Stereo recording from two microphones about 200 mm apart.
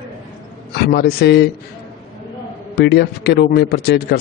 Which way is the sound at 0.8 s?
55° left (ahead or behind).